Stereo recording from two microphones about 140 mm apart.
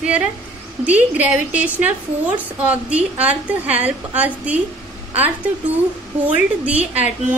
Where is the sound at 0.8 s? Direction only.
10° right (ahead or behind).